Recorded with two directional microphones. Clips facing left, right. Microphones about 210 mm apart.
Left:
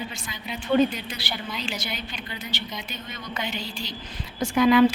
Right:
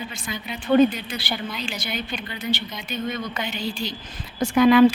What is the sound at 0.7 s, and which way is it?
A woman's voice, 55° right (ahead or behind).